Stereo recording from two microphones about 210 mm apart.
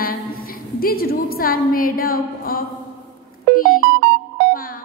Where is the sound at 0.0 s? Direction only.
45° left (ahead or behind).